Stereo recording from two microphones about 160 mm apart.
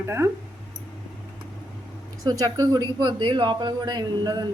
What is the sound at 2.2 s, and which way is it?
Speech, 25° right (ahead or behind).